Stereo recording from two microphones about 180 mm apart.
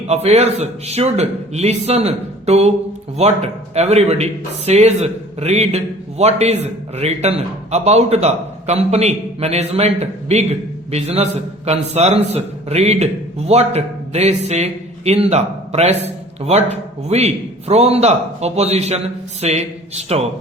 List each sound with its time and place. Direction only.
0.1 s a man's voice: 35° right (ahead or behind)